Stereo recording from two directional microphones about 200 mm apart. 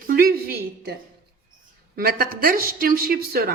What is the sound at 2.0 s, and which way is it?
A woman's voice, 45° right (ahead or behind).